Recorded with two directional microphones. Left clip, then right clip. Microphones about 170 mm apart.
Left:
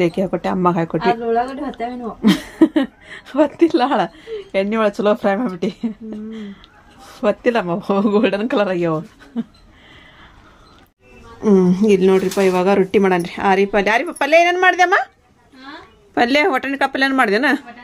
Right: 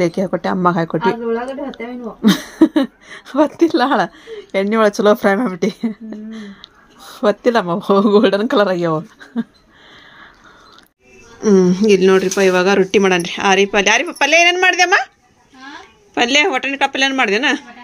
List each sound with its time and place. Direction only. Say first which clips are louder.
0.3 s speech: right 2 dB; 15° right (ahead or behind)
2.2 s a woman's voice: right 1 dB; 10° right (ahead or behind)
11.4 s speech: right 2 dB; 5° left (ahead or behind)
16.2 s speech: right 1 dB; 25° left (ahead or behind)